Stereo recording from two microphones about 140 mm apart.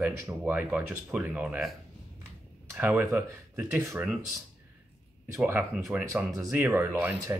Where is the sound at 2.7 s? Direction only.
10° right (ahead or behind).